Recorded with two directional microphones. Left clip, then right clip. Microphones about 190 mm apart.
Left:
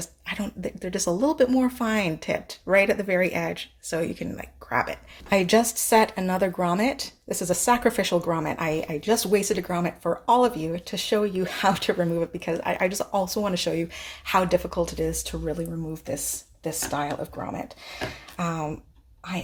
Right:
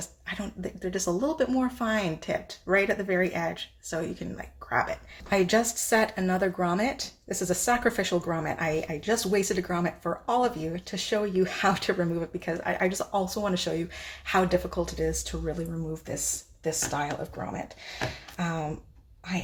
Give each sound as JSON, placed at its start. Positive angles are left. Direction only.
{"t": 0.3, "sound": "speech", "side_deg": 35}
{"t": 17.4, "sound": "speech", "side_deg": 25}